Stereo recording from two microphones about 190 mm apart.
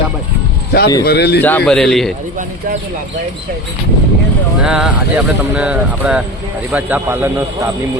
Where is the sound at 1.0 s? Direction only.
55° left (ahead or behind).